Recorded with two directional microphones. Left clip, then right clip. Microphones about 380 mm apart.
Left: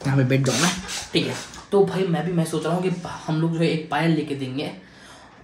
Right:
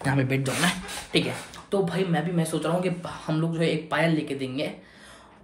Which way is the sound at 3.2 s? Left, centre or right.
Centre.